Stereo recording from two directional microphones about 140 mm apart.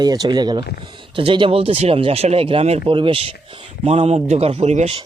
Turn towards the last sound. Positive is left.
turn(degrees=-50)  # may be behind; listen again after turning